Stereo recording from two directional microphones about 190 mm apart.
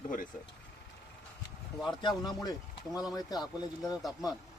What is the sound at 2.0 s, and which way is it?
Speech, 20° left (ahead or behind).